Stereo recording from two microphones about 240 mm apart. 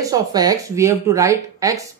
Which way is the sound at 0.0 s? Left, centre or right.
Centre.